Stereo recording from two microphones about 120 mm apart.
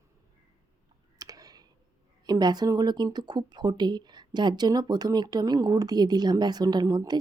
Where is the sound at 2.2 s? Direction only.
35° right (ahead or behind).